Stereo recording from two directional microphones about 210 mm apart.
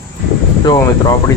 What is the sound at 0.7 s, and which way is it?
Speech, 15° left (ahead or behind).